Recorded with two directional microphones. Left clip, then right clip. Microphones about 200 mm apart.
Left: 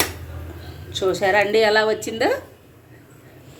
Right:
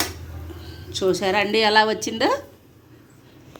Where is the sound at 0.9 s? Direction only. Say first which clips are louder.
Left 2 dB; 45° right (ahead or behind).